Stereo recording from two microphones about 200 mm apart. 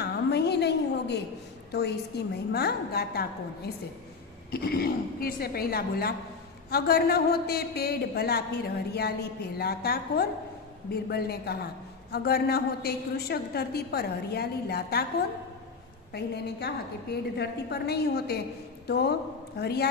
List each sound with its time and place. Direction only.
0.0 s a sound: 55° left (ahead or behind)
1.7 s a man's voice: 55° left (ahead or behind)
16.1 s a woman's voice: 55° left (ahead or behind)